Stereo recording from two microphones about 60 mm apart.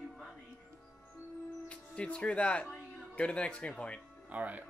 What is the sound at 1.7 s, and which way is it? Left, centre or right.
Speech, centre.